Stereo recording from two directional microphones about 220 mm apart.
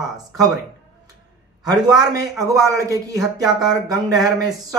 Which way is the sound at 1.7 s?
15° right (ahead or behind).